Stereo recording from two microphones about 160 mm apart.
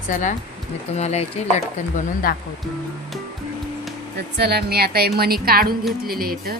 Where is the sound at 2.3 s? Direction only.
65° left (ahead or behind).